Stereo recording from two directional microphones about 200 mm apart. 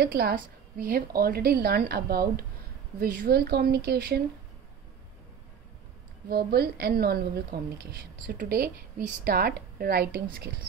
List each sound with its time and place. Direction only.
0.0 s a woman's voice: 50° right (ahead or behind)
6.2 s a woman's voice: 50° right (ahead or behind)